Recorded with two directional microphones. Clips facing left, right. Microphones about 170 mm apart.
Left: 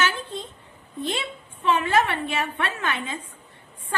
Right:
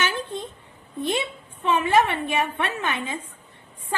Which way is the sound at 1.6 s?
20° right (ahead or behind).